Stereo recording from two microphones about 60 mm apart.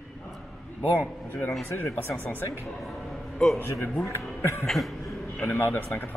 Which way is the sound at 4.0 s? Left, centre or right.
Left.